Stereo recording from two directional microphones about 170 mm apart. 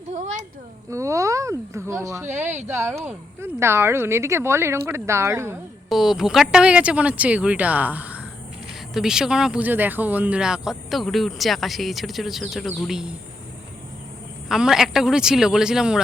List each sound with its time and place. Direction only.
0.1 s speech: 45° right (ahead or behind)
0.9 s speech: 20° right (ahead or behind)
5.9 s speech: centre (ahead or behind)
14.5 s speech: centre (ahead or behind)